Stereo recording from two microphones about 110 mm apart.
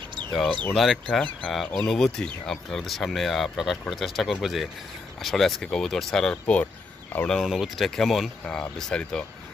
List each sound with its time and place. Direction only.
0.7 s speech: centre (ahead or behind)
7.2 s speech: centre (ahead or behind)